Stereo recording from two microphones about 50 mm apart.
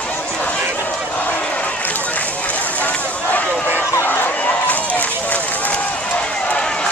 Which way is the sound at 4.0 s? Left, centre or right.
Left.